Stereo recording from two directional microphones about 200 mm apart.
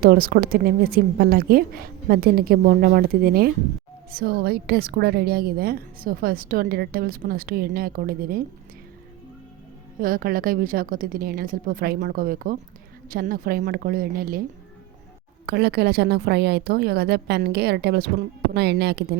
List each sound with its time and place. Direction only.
0.0 s a woman's voice: 50° right (ahead or behind)
10.0 s a woman's voice: 45° right (ahead or behind)
15.4 s a woman's voice: 55° right (ahead or behind)